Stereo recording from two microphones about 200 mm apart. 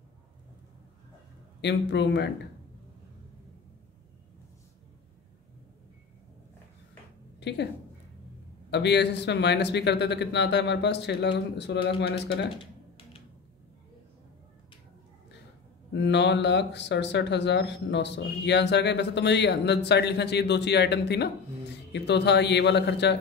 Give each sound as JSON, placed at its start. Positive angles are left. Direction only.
{"t": 1.6, "sound": "speech", "side_deg": 60}
{"t": 7.3, "sound": "a sound", "side_deg": 60}
{"t": 8.6, "sound": "speech", "side_deg": 60}
{"t": 15.9, "sound": "speech", "side_deg": 60}